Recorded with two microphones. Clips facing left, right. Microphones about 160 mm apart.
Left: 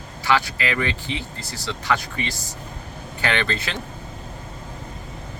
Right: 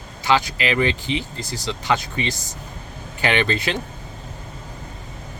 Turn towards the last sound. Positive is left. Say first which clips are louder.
# right 4 dB
turn(degrees=-20)  # may be behind; listen again after turning